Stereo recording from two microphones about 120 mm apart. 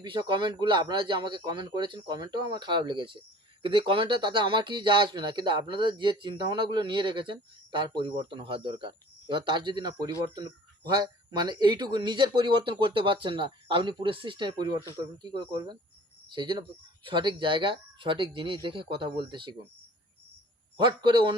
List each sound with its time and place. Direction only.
0.0 s speech: 40° right (ahead or behind)
20.7 s speech: 40° right (ahead or behind)